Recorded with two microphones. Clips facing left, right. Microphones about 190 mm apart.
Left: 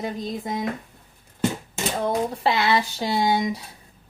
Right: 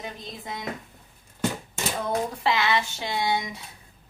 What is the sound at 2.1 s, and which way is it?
A woman's voice, 35° left (ahead or behind).